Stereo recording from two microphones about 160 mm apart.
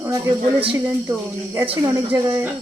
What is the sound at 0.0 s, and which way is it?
Speech, 20° right (ahead or behind).